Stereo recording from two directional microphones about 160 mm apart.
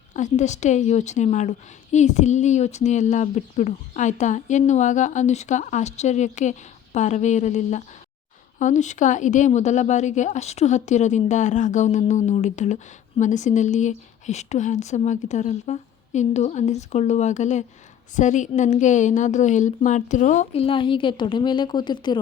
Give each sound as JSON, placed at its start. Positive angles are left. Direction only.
{"t": 0.1, "sound": "speech", "side_deg": 50}